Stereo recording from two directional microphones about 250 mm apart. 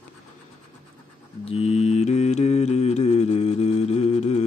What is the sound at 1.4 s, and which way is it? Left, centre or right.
Mantra, left.